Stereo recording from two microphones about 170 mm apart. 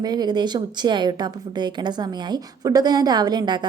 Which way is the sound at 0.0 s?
25° right (ahead or behind).